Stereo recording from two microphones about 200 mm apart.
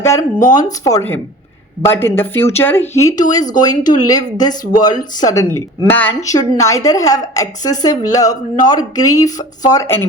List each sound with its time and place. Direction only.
0.0 s a woman's voice: 15° left (ahead or behind)